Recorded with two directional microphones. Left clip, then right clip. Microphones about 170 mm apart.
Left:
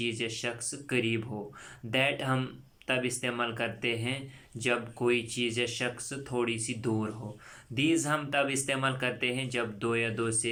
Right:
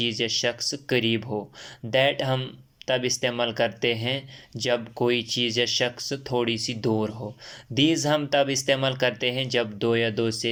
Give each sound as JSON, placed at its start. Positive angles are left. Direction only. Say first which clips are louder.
{"t": 0.0, "sound": "speech", "louder": "right 8 dB", "side_deg": -40}